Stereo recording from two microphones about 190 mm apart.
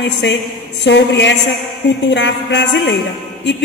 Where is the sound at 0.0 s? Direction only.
65° left (ahead or behind).